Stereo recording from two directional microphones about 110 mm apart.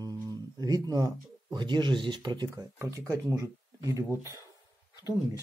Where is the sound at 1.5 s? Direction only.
45° right (ahead or behind).